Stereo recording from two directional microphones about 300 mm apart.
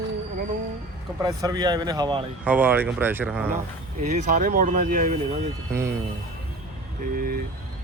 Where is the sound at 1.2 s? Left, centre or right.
Centre.